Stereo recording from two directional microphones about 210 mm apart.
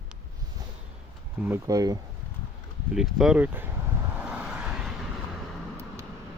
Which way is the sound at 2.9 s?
Centre (ahead or behind).